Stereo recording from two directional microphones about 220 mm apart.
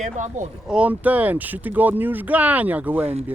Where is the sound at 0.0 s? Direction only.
35° right (ahead or behind).